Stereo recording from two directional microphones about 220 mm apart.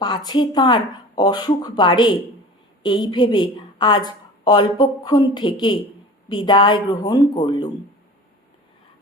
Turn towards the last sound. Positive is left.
turn(degrees=20)  # may be behind; listen again after turning